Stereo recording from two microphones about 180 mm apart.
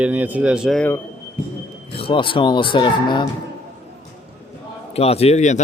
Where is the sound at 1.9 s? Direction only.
30° left (ahead or behind).